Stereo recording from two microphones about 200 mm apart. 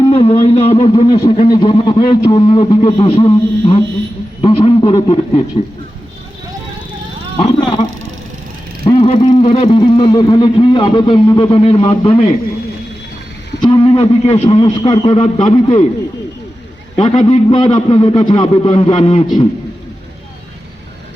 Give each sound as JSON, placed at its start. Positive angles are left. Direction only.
{"t": 0.0, "sound": "speech", "side_deg": 25}
{"t": 4.4, "sound": "a sound", "side_deg": 25}
{"t": 7.3, "sound": "vehicle", "side_deg": 25}
{"t": 8.8, "sound": "speech", "side_deg": 30}
{"t": 13.6, "sound": "speech", "side_deg": 20}
{"t": 15.5, "sound": "speech", "side_deg": 25}
{"t": 17.2, "sound": "speech", "side_deg": 30}